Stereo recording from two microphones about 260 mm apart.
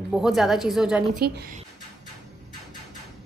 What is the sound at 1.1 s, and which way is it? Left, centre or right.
Speech, right.